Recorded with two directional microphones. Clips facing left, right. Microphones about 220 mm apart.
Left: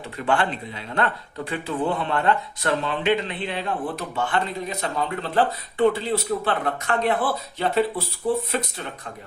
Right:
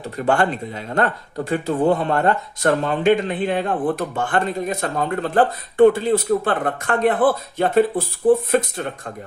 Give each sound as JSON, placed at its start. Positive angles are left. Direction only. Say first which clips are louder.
{"t": 0.2, "sound": "speech", "louder": "right 4 dB", "side_deg": -45}